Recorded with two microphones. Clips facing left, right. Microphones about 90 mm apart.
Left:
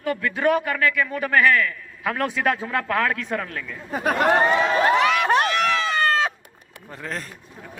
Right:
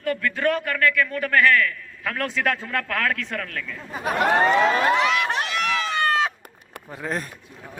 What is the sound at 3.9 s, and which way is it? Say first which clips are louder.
Speech: left 4 dB; 55° left (ahead or behind).